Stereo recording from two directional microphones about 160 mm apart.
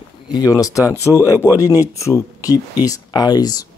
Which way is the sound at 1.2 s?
20° left (ahead or behind).